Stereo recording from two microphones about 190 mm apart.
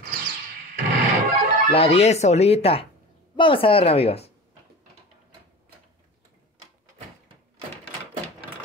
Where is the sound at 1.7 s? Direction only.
35° left (ahead or behind).